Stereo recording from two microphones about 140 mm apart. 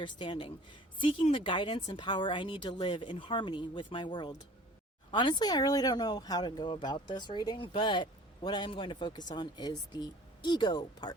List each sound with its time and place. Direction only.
0.0 s speech: 35° left (ahead or behind)